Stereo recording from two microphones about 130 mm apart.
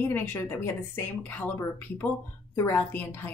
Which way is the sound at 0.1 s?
15° left (ahead or behind).